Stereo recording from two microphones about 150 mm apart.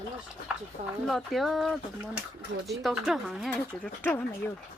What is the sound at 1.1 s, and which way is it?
Speech, centre (ahead or behind).